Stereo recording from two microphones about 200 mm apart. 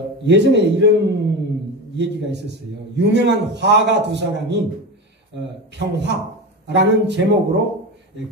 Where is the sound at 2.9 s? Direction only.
60° right (ahead or behind).